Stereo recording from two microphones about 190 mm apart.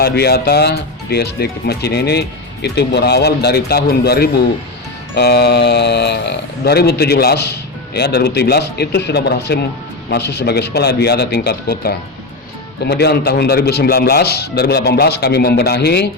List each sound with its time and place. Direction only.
0.0 s speech: 55° left (ahead or behind)